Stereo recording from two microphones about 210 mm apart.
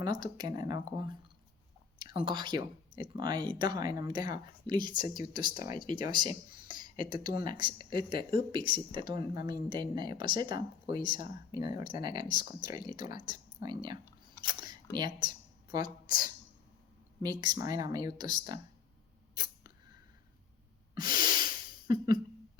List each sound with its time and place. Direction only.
0.0 s speech: 20° right (ahead or behind)
19.3 s a sound: 20° right (ahead or behind)
20.9 s breathing: 20° right (ahead or behind)